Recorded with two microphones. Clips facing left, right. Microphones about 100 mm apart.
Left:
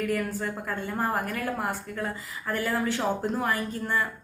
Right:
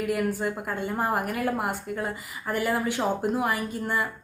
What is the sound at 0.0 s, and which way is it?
A woman's voice, 15° right (ahead or behind).